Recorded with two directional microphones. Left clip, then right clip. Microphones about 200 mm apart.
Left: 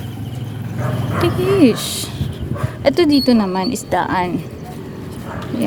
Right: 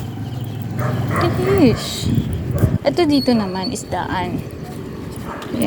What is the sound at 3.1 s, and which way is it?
Speech, 15° left (ahead or behind).